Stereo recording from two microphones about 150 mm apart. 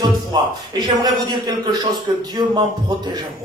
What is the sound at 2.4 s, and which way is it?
Music, 30° right (ahead or behind).